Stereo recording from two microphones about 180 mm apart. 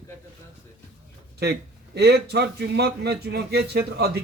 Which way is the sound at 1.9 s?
65° right (ahead or behind).